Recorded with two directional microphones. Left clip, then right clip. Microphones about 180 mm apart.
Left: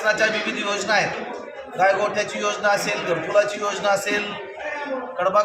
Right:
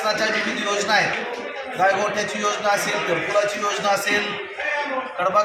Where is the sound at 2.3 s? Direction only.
5° left (ahead or behind).